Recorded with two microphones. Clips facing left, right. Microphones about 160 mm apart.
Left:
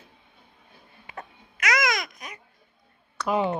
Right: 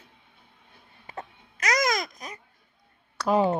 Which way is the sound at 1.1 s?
40° right (ahead or behind).